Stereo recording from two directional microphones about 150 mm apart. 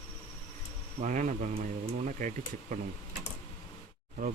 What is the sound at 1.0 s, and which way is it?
Speech, 55° right (ahead or behind).